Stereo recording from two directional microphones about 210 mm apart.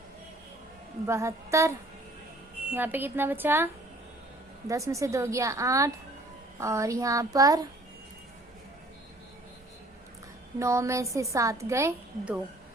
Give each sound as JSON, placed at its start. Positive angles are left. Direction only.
{"t": 1.0, "sound": "a woman's voice", "side_deg": -15}
{"t": 2.7, "sound": "a woman's voice", "side_deg": -10}
{"t": 10.6, "sound": "a woman's voice", "side_deg": -15}